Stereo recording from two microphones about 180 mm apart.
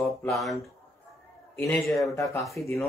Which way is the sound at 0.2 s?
Centre (ahead or behind).